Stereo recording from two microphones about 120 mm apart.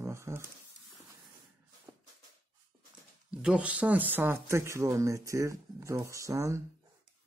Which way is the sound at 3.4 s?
10° right (ahead or behind).